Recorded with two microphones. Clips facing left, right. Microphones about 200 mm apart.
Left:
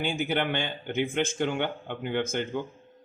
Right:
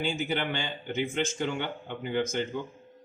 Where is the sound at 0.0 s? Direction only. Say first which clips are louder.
Left 2 dB; 55° left (ahead or behind).